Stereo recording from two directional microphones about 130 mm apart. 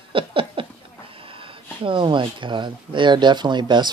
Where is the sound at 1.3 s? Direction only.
40° right (ahead or behind).